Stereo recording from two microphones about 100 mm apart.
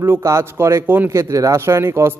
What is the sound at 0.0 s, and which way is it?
Speech, 25° right (ahead or behind).